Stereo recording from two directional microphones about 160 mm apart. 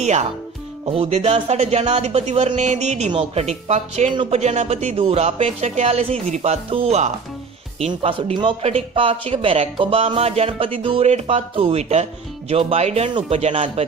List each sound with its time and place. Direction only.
0.0 s speech: 45° right (ahead or behind)